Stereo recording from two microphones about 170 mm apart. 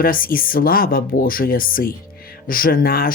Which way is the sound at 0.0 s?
55° left (ahead or behind).